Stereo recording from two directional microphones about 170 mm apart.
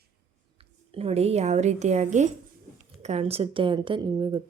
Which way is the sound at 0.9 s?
35° right (ahead or behind).